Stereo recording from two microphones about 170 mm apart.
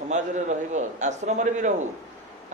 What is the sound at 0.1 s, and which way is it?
A man's voice, 45° right (ahead or behind).